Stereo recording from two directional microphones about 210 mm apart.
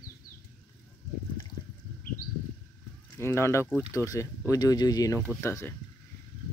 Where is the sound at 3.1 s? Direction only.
10° left (ahead or behind).